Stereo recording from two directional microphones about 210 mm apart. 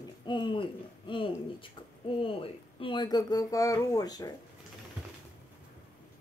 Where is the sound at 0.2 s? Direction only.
20° left (ahead or behind).